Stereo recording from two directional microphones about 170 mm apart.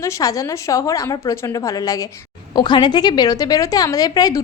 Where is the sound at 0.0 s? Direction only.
20° left (ahead or behind).